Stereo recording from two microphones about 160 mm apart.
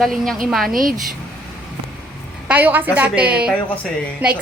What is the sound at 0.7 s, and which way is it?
Speech, 60° right (ahead or behind).